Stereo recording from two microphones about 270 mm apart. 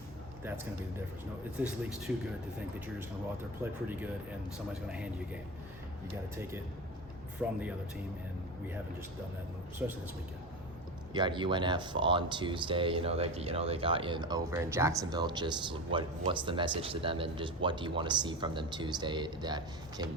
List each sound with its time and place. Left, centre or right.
1.5 s speech: centre
3.6 s speech: centre
9.8 s speech: centre
11.1 s speech: centre